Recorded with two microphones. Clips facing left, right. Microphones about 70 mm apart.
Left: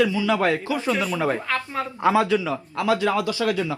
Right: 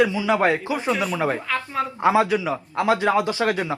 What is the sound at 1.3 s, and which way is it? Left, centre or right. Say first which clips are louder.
Speech: right 1 dB; centre.